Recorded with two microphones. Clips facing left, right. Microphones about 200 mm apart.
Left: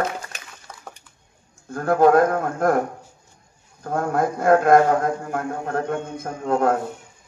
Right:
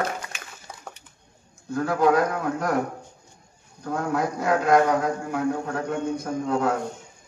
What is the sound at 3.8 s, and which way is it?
A man's voice, 50° left (ahead or behind).